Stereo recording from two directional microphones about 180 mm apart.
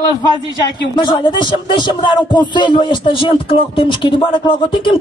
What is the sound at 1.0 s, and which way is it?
Speech, 25° left (ahead or behind).